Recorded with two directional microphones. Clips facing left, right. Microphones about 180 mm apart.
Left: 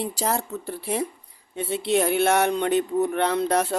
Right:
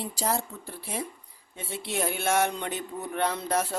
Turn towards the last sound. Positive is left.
turn(degrees=65)  # may be behind; listen again after turning